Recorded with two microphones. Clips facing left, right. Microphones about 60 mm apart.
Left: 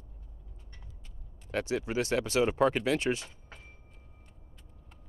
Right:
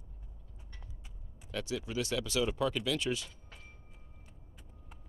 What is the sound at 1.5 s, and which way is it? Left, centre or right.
Speech, left.